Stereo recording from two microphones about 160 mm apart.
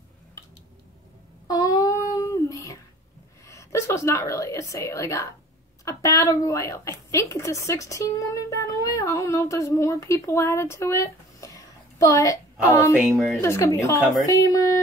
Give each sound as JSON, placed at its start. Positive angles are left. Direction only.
{"t": 1.5, "sound": "a sound", "side_deg": 25}
{"t": 3.4, "sound": "a woman's voice", "side_deg": 20}
{"t": 13.0, "sound": "speech", "side_deg": 0}
{"t": 13.4, "sound": "a woman's voice", "side_deg": 15}